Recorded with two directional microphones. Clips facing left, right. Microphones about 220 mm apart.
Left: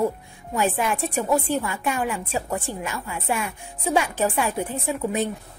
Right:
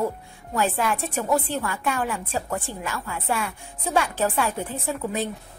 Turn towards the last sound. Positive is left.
turn(degrees=15)  # may be behind; listen again after turning